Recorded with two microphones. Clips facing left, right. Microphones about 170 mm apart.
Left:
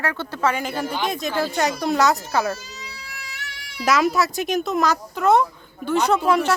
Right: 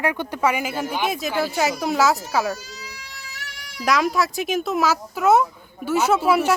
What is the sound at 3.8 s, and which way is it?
Speech, centre (ahead or behind).